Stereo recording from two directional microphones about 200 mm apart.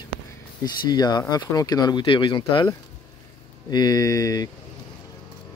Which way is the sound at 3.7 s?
20° left (ahead or behind).